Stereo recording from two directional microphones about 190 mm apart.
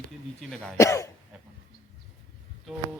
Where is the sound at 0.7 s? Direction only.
15° left (ahead or behind).